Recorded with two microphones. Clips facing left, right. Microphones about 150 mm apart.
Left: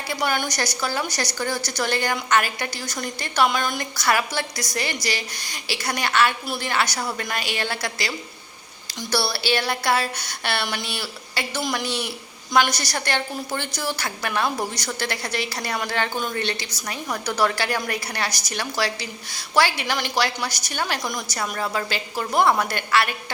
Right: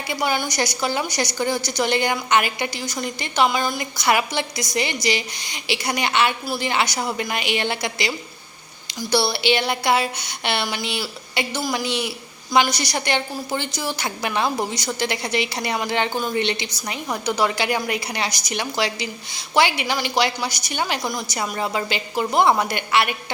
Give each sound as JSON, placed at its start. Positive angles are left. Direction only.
{"t": 0.1, "sound": "a woman's voice", "side_deg": -10}
{"t": 3.9, "sound": "a woman's voice", "side_deg": -15}